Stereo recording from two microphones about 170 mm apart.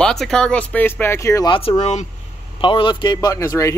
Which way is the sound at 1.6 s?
35° left (ahead or behind).